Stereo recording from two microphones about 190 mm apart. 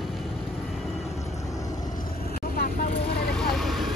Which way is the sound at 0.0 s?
Centre (ahead or behind).